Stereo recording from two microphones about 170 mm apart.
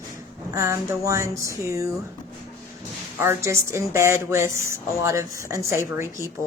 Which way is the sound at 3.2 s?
15° right (ahead or behind).